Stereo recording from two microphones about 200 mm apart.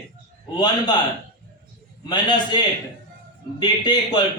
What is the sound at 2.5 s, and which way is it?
A man's voice, 20° left (ahead or behind).